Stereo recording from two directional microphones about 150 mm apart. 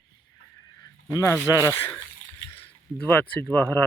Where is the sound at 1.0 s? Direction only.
15° left (ahead or behind).